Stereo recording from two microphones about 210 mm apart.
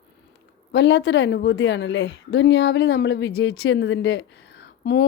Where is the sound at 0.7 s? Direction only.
55° left (ahead or behind).